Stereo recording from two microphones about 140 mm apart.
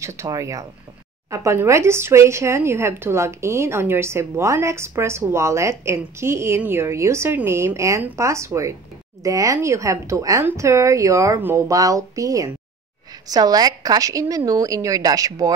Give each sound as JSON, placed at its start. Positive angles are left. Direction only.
{"t": 0.0, "sound": "speech", "side_deg": -20}